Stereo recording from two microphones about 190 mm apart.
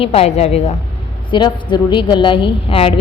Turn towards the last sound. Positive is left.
turn(degrees=30)  # may be behind; listen again after turning